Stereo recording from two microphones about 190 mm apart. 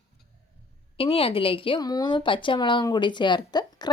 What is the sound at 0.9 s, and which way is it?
Speech, 30° left (ahead or behind).